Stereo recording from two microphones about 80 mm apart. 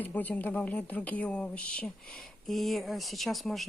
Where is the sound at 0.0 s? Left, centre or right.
Left.